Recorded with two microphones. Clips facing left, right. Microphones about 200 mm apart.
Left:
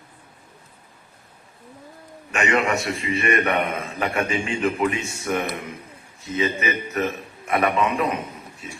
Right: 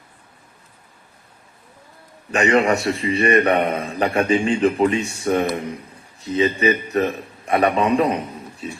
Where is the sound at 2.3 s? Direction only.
35° right (ahead or behind).